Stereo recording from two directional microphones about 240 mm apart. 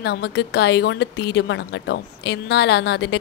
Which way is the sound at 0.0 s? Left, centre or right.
Left.